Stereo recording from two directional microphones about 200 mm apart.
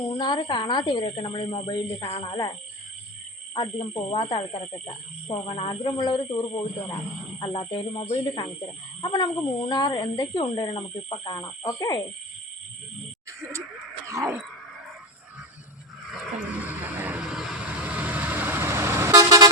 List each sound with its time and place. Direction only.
0.0 s speech: 25° left (ahead or behind)
3.5 s speech: 25° left (ahead or behind)
14.1 s a sound: 10° right (ahead or behind)
16.0 s vehicle: 5° right (ahead or behind)